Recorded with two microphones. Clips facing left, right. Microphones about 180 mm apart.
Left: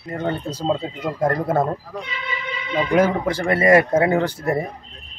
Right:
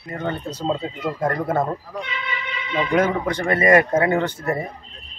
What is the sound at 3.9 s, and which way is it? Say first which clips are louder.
Speech: left 1 dB; 10° left (ahead or behind).